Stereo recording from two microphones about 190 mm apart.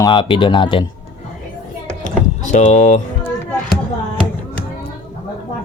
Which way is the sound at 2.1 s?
40° left (ahead or behind).